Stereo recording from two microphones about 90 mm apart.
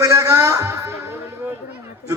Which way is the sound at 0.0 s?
40° right (ahead or behind).